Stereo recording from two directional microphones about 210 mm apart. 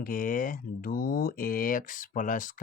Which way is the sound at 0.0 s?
40° left (ahead or behind).